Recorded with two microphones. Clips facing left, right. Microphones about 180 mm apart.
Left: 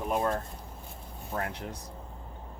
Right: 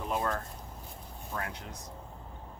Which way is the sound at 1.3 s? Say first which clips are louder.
Left 5 dB; 35° left (ahead or behind).